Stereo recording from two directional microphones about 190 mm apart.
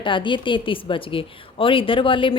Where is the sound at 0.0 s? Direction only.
25° left (ahead or behind).